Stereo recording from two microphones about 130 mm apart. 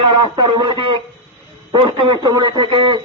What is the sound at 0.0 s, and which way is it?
A man's voice, 40° right (ahead or behind).